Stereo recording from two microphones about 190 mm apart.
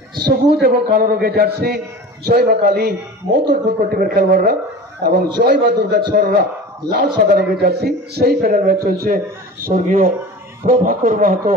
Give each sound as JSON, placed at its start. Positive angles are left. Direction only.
{"t": 0.6, "sound": "a man's voice", "side_deg": -55}